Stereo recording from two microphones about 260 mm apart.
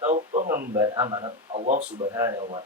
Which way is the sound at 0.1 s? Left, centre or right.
Right.